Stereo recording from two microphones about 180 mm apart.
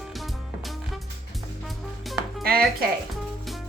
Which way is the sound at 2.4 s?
60° right (ahead or behind).